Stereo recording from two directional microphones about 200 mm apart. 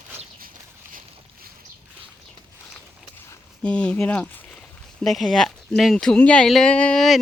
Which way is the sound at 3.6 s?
5° left (ahead or behind).